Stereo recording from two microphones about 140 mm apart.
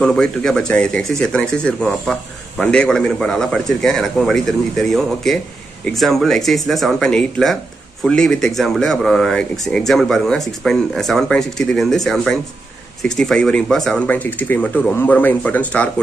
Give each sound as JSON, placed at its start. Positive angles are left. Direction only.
{"t": 0.0, "sound": "speech", "side_deg": 5}